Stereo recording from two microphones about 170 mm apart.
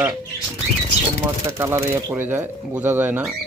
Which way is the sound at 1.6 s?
15° right (ahead or behind).